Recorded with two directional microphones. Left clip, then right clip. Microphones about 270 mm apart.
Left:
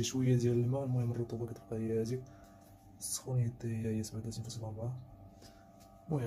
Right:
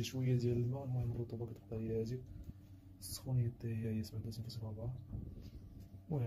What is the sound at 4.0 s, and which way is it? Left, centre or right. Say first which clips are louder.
Speech: left 5 dB; centre.